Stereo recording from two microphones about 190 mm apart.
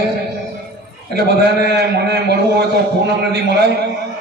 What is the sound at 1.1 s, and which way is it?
A man's voice, 60° right (ahead or behind).